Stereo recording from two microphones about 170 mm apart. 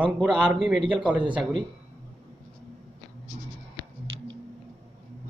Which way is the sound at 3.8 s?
15° left (ahead or behind).